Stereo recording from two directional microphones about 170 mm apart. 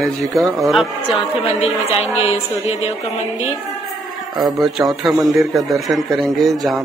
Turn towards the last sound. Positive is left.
turn(degrees=0)  # may be behind; listen again after turning